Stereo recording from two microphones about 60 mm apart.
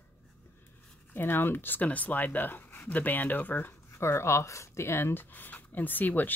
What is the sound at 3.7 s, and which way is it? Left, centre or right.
Speech, left.